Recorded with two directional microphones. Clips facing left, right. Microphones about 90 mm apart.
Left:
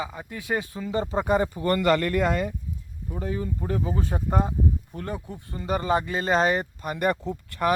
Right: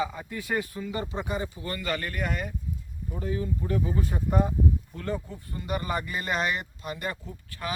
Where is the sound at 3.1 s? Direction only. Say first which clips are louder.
Left 1 dB; 65° left (ahead or behind).